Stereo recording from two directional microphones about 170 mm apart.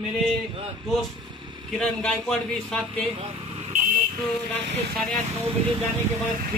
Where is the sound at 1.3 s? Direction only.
25° right (ahead or behind).